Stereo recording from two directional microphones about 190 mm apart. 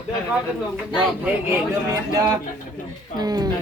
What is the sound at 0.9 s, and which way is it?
A woman's voice, 10° right (ahead or behind).